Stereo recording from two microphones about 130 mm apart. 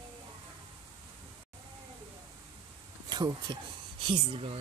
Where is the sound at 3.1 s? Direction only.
35° right (ahead or behind).